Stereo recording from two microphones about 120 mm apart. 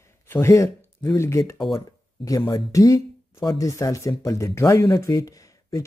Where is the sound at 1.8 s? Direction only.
30° left (ahead or behind).